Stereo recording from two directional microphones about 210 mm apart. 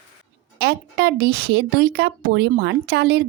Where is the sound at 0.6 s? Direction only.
50° right (ahead or behind).